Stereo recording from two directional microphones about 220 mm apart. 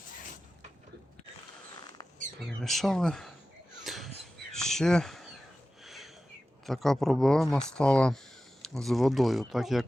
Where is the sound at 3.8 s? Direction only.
Centre (ahead or behind).